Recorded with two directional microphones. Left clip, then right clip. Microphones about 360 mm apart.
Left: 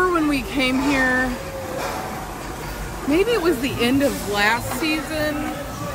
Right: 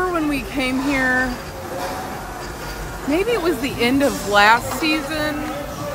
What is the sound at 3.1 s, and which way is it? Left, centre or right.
Speech, centre.